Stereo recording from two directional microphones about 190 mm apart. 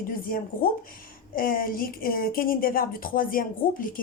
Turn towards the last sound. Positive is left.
turn(degrees=45)  # may be behind; listen again after turning